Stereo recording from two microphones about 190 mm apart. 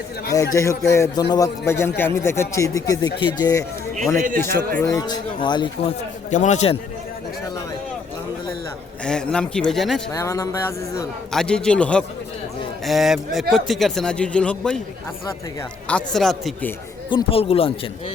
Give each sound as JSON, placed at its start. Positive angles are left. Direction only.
{"t": 0.3, "sound": "speech", "side_deg": 15}
{"t": 4.8, "sound": "a man's voice", "side_deg": 15}
{"t": 6.3, "sound": "a man's voice", "side_deg": 40}
{"t": 9.0, "sound": "a man's voice", "side_deg": 5}
{"t": 10.1, "sound": "speech", "side_deg": 15}
{"t": 11.3, "sound": "a man's voice", "side_deg": 5}
{"t": 15.9, "sound": "a man's voice", "side_deg": 5}
{"t": 17.1, "sound": "a man's voice", "side_deg": 30}